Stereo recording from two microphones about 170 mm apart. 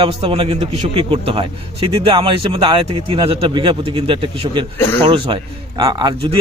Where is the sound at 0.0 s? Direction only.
35° right (ahead or behind).